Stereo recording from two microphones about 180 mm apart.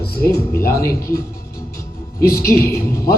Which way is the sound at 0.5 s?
15° left (ahead or behind).